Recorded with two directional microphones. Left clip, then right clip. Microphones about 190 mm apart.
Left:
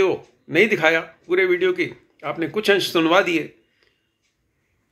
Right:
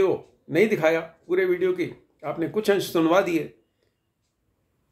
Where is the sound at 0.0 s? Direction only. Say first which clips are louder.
Left 3 dB; centre (ahead or behind).